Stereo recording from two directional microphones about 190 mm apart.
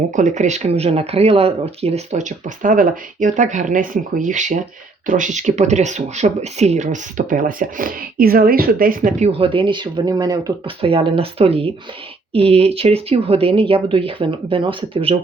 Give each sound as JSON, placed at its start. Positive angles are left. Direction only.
{"t": 0.2, "sound": "speech", "side_deg": -40}